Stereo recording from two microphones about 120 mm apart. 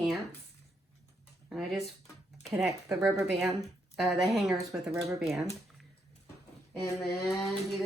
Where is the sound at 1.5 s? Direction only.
Centre (ahead or behind).